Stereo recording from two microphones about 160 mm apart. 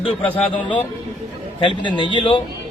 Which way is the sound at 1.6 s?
30° left (ahead or behind).